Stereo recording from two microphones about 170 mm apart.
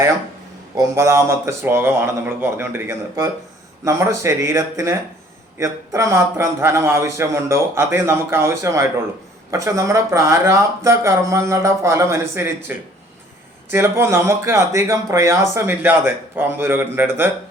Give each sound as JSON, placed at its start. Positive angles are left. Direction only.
{"t": 0.8, "sound": "speech", "side_deg": -15}